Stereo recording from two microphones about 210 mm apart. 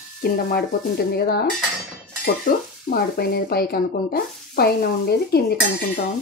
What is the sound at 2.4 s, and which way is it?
Speech, 45° left (ahead or behind).